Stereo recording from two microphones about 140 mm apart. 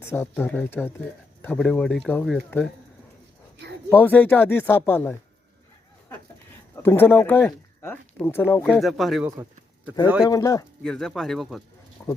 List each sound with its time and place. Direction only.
0.0 s speech: 15° left (ahead or behind)
3.8 s speech: 15° left (ahead or behind)
6.8 s speech: 15° left (ahead or behind)
8.6 s speech: centre (ahead or behind)
10.2 s speech: 25° left (ahead or behind)
10.8 s speech: 5° left (ahead or behind)
12.0 s keys jangling: 15° left (ahead or behind)